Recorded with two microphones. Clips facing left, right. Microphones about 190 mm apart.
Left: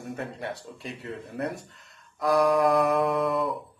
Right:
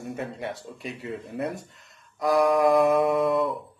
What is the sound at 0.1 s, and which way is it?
Speech, centre (ahead or behind).